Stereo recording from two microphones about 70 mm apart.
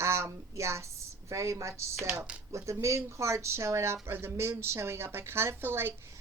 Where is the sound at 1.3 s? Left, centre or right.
Right.